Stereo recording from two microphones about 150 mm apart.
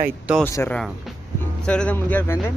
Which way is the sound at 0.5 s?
20° left (ahead or behind).